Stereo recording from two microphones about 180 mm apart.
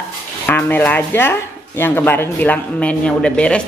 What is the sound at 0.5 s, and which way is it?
Speech, 10° left (ahead or behind).